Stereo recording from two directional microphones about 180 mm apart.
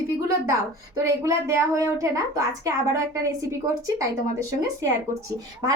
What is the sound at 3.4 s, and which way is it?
Speech, 20° right (ahead or behind).